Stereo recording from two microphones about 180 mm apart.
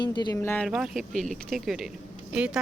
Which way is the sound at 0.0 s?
25° left (ahead or behind).